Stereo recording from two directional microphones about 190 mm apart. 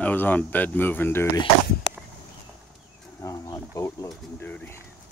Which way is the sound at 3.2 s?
15° left (ahead or behind).